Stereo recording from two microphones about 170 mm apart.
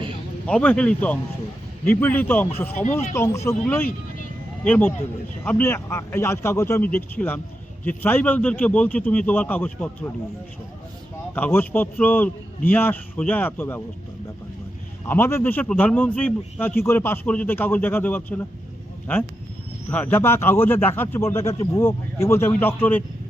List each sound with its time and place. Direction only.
0.4 s speech: 5° left (ahead or behind)
11.3 s speech: 10° left (ahead or behind)
15.0 s speech: 15° left (ahead or behind)
19.9 s speech: 10° left (ahead or behind)